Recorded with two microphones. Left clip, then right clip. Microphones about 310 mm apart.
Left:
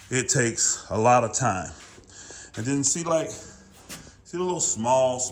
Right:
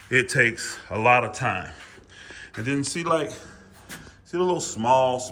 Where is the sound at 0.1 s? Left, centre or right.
Centre.